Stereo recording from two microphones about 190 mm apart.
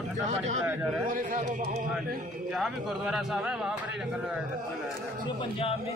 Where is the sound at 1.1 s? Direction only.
40° right (ahead or behind).